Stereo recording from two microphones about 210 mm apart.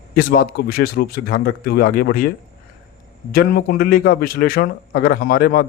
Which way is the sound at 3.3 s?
45° left (ahead or behind).